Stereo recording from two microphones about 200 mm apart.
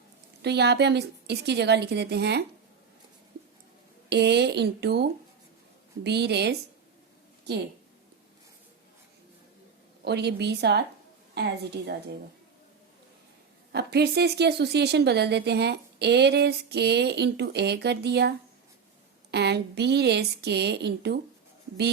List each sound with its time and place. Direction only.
0.4 s a woman's voice: 55° right (ahead or behind)
4.1 s a woman's voice: 55° right (ahead or behind)
10.0 s a woman's voice: 55° right (ahead or behind)
13.7 s a woman's voice: 55° right (ahead or behind)